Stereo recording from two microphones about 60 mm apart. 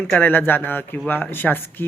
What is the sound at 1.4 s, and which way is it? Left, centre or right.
Speech, centre.